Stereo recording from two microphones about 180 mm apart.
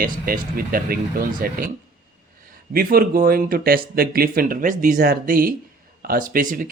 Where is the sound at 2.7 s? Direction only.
55° right (ahead or behind).